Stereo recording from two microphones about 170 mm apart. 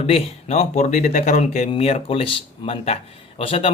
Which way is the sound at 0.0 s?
40° left (ahead or behind).